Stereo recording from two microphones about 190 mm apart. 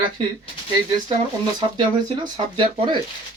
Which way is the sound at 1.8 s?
25° right (ahead or behind).